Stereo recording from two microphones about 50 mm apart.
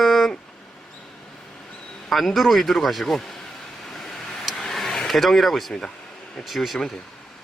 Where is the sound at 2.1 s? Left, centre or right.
Centre.